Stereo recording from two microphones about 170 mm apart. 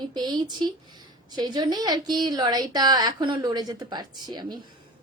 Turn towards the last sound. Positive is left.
turn(degrees=-25)  # may be behind; listen again after turning